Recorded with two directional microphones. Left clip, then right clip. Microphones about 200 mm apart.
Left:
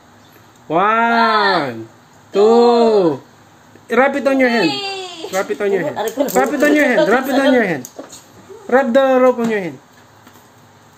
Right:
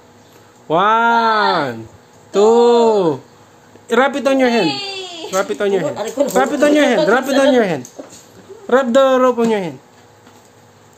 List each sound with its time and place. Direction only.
0.7 s a woman's voice: 25° right (ahead or behind)
2.8 s speech: 30° right (ahead or behind)
3.8 s a woman's voice: 15° right (ahead or behind)